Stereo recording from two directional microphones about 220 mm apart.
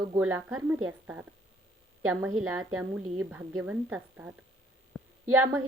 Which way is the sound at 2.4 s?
10° right (ahead or behind).